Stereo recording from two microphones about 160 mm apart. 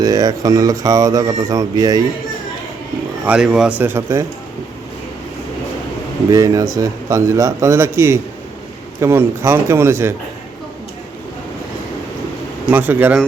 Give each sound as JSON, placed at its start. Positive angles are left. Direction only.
{"t": 0.0, "sound": "speech", "side_deg": -25}
{"t": 3.2, "sound": "speech", "side_deg": -5}
{"t": 6.3, "sound": "speech", "side_deg": -20}
{"t": 12.7, "sound": "speech", "side_deg": -10}